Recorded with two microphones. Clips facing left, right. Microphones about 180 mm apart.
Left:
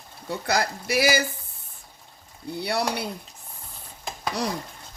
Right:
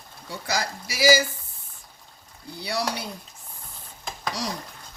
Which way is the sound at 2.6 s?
60° left (ahead or behind).